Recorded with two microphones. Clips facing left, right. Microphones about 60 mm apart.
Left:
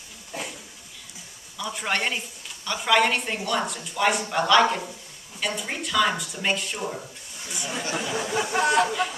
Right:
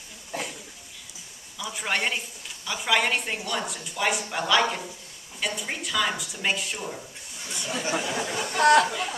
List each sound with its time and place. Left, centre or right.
1.6 s a woman's voice: centre
7.4 s speech: centre
7.9 s speech: centre
8.4 s speech: centre